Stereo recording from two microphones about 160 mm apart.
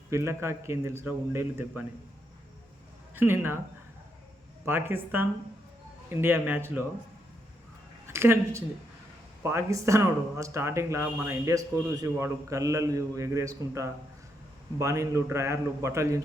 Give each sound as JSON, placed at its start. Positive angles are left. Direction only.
{"t": 0.1, "sound": "a man's voice", "side_deg": -15}
{"t": 3.2, "sound": "a man's voice", "side_deg": -15}
{"t": 4.6, "sound": "a man's voice", "side_deg": -15}
{"t": 8.0, "sound": "a man's voice", "side_deg": -15}